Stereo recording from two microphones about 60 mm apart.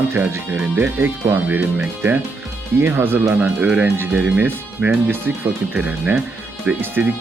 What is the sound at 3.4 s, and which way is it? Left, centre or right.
Speech, right.